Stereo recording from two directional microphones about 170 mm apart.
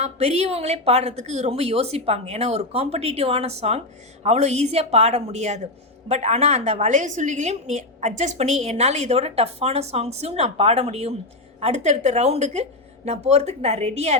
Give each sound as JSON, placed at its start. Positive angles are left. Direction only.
{"t": 0.0, "sound": "a woman's voice", "side_deg": -40}